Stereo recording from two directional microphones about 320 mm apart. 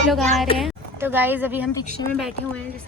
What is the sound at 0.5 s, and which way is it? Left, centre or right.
Speech, centre.